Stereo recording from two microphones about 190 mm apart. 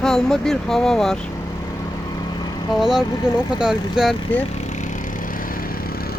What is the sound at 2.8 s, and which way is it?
Speech, centre (ahead or behind).